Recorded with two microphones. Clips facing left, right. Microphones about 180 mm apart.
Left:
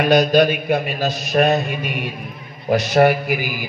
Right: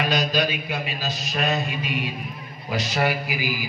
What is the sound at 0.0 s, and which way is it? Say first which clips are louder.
A man's voice: left 9 dB; 55° left (ahead or behind).